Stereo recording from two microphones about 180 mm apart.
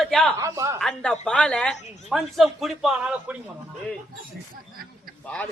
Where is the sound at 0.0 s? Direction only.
5° left (ahead or behind).